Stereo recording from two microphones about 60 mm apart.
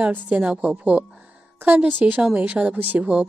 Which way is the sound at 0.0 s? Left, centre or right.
Right.